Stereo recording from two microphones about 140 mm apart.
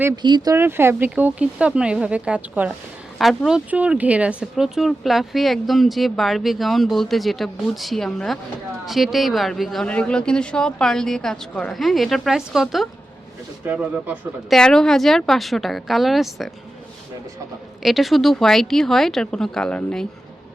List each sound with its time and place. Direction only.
0.2 s speech: 30° right (ahead or behind)
0.5 s speech: 15° right (ahead or behind); by 16.5 s centre (ahead or behind)
17.8 s speech: centre (ahead or behind)